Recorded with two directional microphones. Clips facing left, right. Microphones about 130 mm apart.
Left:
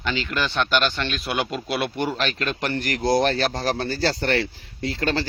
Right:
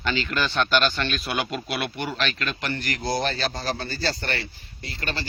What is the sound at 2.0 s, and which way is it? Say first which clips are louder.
Speech: left 3 dB; 40° left (ahead or behind).